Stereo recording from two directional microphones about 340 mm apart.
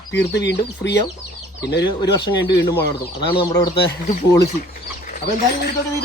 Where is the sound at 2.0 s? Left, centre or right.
Centre.